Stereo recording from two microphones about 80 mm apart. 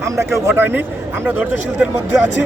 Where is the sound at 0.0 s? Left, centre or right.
Right.